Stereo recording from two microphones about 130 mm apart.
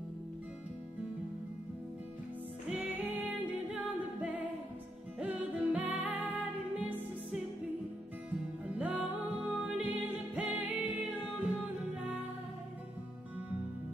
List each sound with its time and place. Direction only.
4.2 s music: 10° right (ahead or behind)
8.3 s music: 10° right (ahead or behind)